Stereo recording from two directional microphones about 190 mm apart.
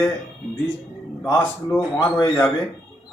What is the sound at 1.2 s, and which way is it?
A man's voice, 15° left (ahead or behind).